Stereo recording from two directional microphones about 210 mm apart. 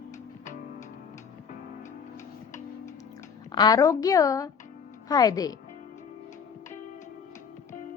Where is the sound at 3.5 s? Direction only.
20° left (ahead or behind).